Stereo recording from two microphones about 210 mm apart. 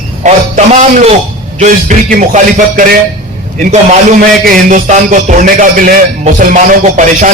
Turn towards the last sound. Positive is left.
turn(degrees=-35)  # may be behind; listen again after turning